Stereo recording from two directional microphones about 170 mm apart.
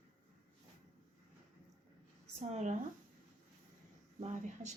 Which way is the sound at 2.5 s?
45° right (ahead or behind).